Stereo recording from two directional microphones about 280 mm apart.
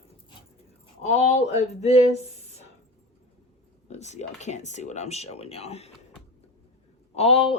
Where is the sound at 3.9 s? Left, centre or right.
Left.